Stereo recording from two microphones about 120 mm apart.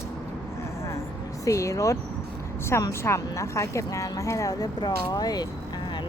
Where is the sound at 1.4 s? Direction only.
25° left (ahead or behind).